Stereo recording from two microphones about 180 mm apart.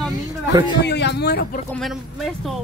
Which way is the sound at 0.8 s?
70° left (ahead or behind).